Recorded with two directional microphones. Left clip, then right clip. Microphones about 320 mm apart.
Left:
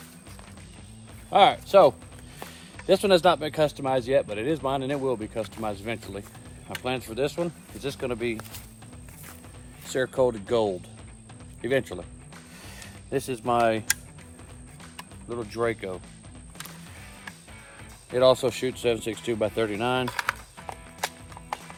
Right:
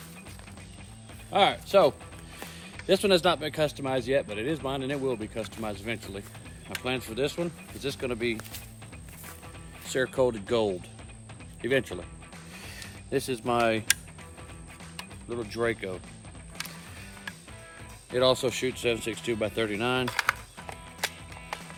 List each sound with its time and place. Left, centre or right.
1.3 s speech: centre
9.8 s speech: centre
12.6 s music: centre
14.9 s mechanisms: centre
18.1 s speech: centre
21.0 s music: centre